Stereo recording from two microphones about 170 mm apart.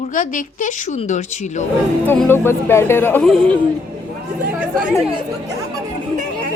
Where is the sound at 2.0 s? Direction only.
10° left (ahead or behind).